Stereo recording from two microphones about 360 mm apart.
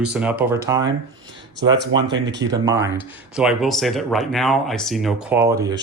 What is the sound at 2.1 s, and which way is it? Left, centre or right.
Speech, right.